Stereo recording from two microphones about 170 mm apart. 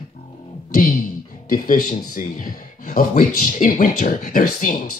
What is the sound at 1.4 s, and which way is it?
Speech, 55° left (ahead or behind).